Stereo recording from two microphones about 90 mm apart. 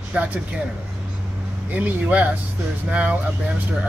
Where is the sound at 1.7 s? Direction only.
15° right (ahead or behind).